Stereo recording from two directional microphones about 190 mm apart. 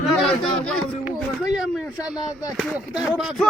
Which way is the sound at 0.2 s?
5° left (ahead or behind).